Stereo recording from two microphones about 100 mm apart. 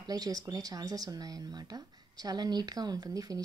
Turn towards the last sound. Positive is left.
turn(degrees=-40)  # may be behind; listen again after turning